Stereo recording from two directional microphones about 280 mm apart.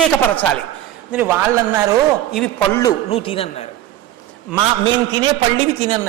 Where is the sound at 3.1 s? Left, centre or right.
Centre.